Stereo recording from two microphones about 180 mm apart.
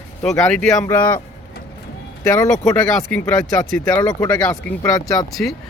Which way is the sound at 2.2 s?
15° left (ahead or behind).